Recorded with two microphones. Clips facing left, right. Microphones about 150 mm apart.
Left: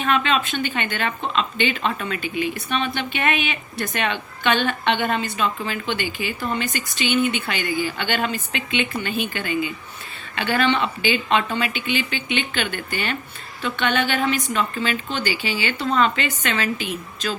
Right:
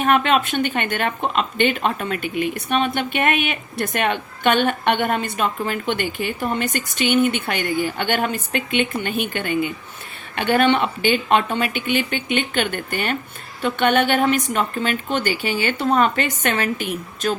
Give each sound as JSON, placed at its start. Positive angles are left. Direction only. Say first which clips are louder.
{"t": 0.0, "sound": "a woman's voice", "louder": "right 4 dB", "side_deg": -50}